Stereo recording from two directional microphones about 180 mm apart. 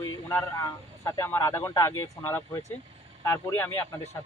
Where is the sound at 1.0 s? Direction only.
15° left (ahead or behind).